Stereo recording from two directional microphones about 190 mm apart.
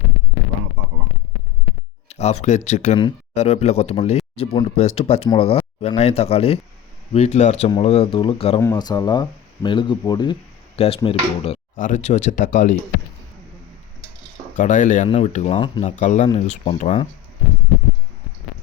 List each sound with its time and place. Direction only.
2.0 s speech: 35° left (ahead or behind)
14.5 s speech: 40° left (ahead or behind)